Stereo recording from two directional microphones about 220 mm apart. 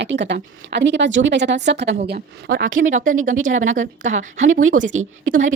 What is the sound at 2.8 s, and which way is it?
A woman's voice, 35° right (ahead or behind).